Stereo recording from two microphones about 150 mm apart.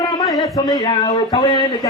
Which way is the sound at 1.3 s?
35° left (ahead or behind).